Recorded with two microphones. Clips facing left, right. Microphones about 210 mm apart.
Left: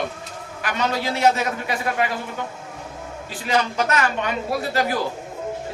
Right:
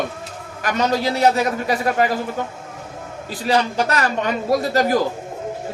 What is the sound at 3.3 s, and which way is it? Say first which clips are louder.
A man's voice: right 3 dB; 35° right (ahead or behind).